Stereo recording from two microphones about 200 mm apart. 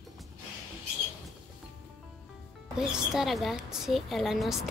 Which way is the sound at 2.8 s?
Centre (ahead or behind).